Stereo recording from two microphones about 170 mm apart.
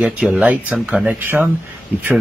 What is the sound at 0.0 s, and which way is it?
Speech, 5° right (ahead or behind).